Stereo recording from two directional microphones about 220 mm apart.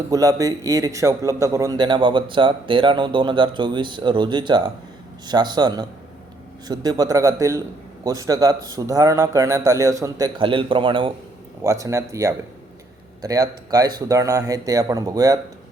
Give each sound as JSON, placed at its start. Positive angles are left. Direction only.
{"t": 0.1, "sound": "a man's voice", "side_deg": -15}